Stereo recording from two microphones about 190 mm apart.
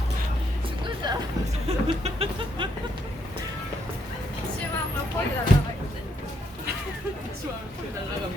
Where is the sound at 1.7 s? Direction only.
30° right (ahead or behind).